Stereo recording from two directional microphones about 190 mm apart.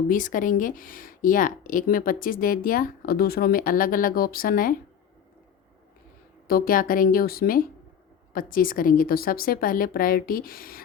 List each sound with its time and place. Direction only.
0.1 s speech: 45° left (ahead or behind)
6.5 s speech: 50° left (ahead or behind)